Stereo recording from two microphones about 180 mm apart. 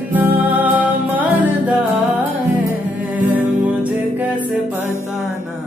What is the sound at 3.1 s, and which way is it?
Music, 10° right (ahead or behind).